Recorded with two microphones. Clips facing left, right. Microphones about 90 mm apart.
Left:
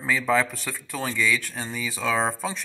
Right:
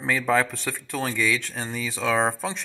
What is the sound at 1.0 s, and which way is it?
Speech, 20° right (ahead or behind).